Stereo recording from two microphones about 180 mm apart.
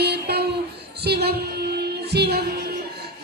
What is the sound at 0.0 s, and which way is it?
Music, 65° right (ahead or behind).